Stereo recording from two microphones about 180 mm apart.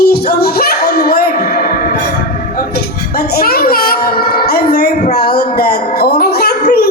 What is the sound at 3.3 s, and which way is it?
Child singing, 55° left (ahead or behind).